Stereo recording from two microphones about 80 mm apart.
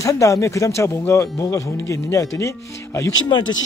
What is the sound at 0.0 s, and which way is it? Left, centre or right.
Speech, left.